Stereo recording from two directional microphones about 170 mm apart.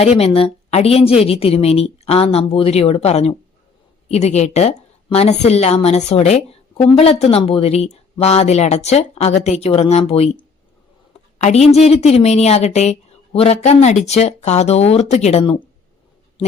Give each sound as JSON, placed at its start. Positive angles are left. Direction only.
{"t": 0.0, "sound": "a woman's voice", "side_deg": 35}